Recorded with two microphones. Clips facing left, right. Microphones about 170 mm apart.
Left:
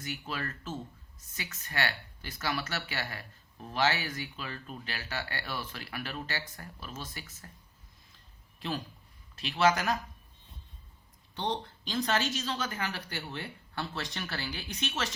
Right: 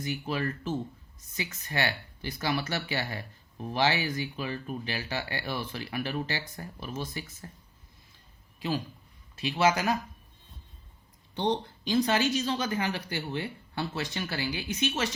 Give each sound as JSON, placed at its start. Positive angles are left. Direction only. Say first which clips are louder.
{"t": 0.1, "sound": "speech", "louder": "right 6 dB", "side_deg": -15}
{"t": 9.5, "sound": "speech", "louder": "right 2 dB", "side_deg": -10}
{"t": 11.9, "sound": "speech", "louder": "right 5 dB", "side_deg": -10}